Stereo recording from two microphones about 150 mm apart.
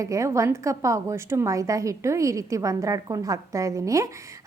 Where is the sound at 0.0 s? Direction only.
20° right (ahead or behind).